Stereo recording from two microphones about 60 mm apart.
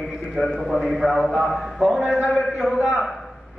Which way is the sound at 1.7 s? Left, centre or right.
Centre.